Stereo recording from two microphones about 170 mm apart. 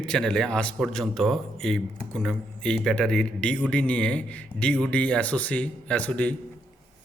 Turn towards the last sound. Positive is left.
turn(degrees=10)  # may be behind; listen again after turning